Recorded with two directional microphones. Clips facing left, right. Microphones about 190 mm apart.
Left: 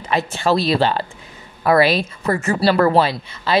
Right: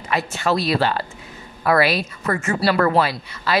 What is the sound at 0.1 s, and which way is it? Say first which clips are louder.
A woman's voice: left 3 dB; 30° left (ahead or behind).